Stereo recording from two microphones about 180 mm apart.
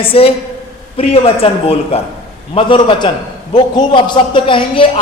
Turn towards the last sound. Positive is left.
turn(degrees=30)  # may be behind; listen again after turning